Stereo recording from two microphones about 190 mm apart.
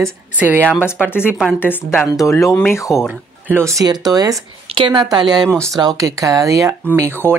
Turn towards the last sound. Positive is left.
turn(degrees=-15)  # may be behind; listen again after turning